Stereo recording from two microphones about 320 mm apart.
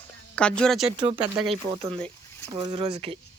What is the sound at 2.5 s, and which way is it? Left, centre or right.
Speech, centre.